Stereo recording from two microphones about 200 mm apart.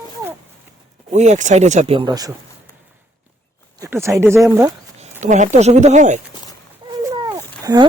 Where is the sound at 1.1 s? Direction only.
35° right (ahead or behind); by 2.3 s 20° right (ahead or behind).